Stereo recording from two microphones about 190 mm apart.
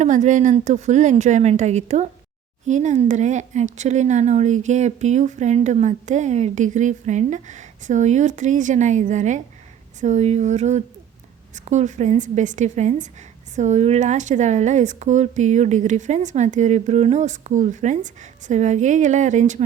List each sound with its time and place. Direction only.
0.0 s speech: 40° right (ahead or behind)